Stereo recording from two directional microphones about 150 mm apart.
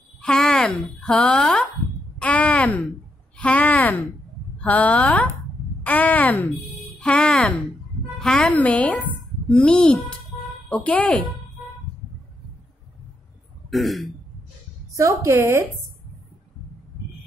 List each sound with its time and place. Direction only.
0.2 s a woman's voice: 5° left (ahead or behind)
13.7 s speech: centre (ahead or behind)
14.9 s a woman's voice: 20° right (ahead or behind)